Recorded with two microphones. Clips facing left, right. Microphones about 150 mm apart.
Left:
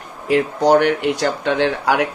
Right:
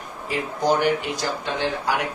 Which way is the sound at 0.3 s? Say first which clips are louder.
Left 8 dB; 65° left (ahead or behind).